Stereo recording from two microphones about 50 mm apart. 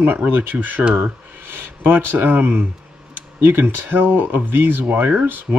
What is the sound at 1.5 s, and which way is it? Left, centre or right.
Speech, right.